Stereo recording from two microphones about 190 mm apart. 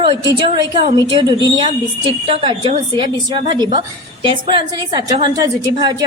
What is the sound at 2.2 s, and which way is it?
A woman's voice, 30° right (ahead or behind).